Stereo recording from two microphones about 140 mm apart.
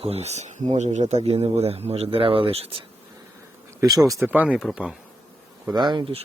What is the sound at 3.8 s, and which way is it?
Speech, 25° right (ahead or behind).